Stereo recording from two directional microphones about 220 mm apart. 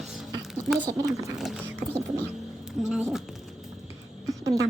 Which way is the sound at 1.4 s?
5° right (ahead or behind).